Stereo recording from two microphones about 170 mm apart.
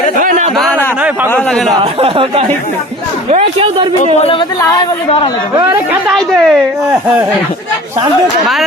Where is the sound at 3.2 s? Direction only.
35° right (ahead or behind).